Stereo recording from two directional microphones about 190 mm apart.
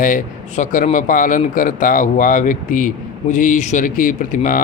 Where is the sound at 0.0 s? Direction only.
45° left (ahead or behind).